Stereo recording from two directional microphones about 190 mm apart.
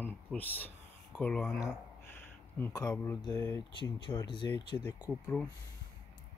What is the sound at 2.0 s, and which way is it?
Speech, 10° left (ahead or behind).